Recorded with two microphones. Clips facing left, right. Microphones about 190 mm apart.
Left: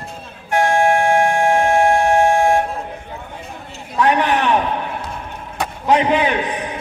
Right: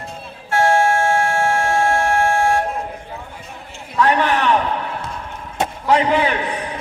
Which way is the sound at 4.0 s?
15° left (ahead or behind).